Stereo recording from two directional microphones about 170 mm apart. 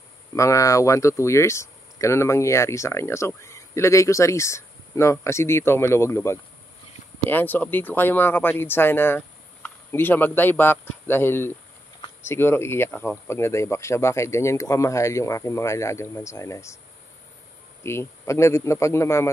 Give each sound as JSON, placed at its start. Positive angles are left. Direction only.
{"t": 0.3, "sound": "speech", "side_deg": 20}
{"t": 17.8, "sound": "speech", "side_deg": 15}